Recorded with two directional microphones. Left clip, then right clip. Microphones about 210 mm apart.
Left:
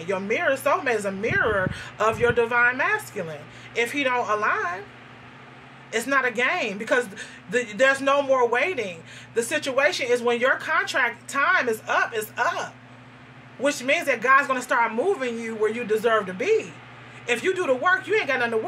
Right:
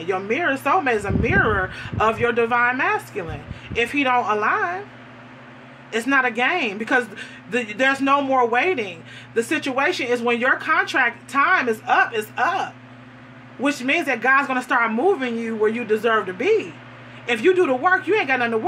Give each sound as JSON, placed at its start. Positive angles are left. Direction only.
{"t": 0.0, "sound": "a man's voice", "side_deg": -40}
{"t": 5.9, "sound": "a man's voice", "side_deg": -40}